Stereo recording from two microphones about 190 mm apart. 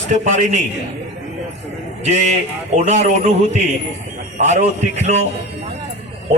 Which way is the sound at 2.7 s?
35° right (ahead or behind).